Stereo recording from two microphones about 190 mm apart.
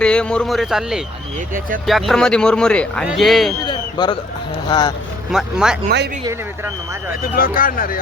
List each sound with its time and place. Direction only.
0.0 s a man's voice: 5° left (ahead or behind)
3.7 s a man's voice: 25° left (ahead or behind)
5.3 s a man's voice: 5° right (ahead or behind)
7.2 s speech: 50° left (ahead or behind)